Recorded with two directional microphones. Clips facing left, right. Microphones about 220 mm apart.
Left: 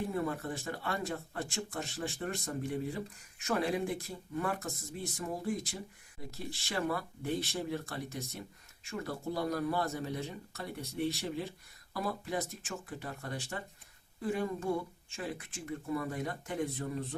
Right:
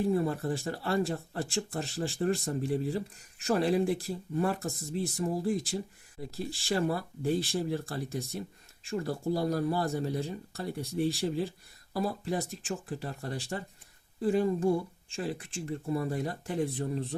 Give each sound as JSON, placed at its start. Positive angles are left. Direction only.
{"t": 0.1, "sound": "speech", "side_deg": -30}
{"t": 6.3, "sound": "speech", "side_deg": -30}